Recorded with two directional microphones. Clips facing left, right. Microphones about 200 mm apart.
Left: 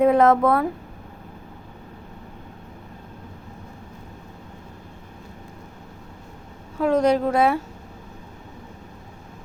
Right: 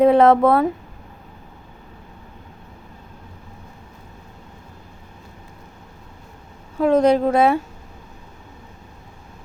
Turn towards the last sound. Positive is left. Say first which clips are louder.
# right 3 dB
turn(degrees=-25)  # may be behind; listen again after turning